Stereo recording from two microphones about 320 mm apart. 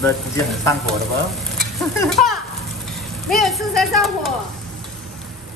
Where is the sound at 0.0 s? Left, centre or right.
Centre.